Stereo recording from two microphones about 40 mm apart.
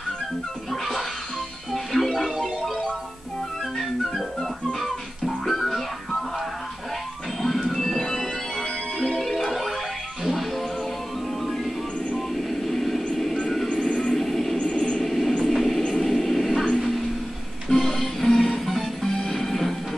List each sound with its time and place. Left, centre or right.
0.7 s music: centre
7.4 s music: centre
11.4 s music: centre
12.4 s a sound: centre
13.9 s music: centre
14.6 s a sound: centre
15.0 s train: centre
17.6 s music: centre